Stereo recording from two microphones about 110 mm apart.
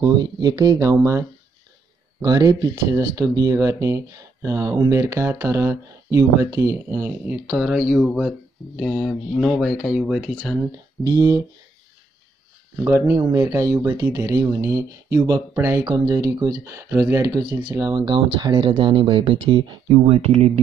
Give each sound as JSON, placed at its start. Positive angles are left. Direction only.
{"t": 0.0, "sound": "speech", "side_deg": -35}
{"t": 2.2, "sound": "speech", "side_deg": -35}
{"t": 11.1, "sound": "speech", "side_deg": -30}
{"t": 12.8, "sound": "speech", "side_deg": -30}
{"t": 15.8, "sound": "speech", "side_deg": -40}
{"t": 17.3, "sound": "speech", "side_deg": -50}
{"t": 19.9, "sound": "speech", "side_deg": -75}